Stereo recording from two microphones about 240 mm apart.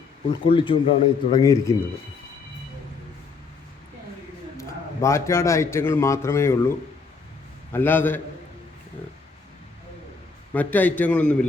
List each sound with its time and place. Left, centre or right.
0.3 s speech: left
4.5 s a man's voice: centre
10.5 s a man's voice: centre